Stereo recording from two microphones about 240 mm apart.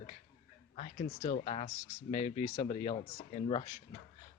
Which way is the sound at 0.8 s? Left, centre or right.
Left.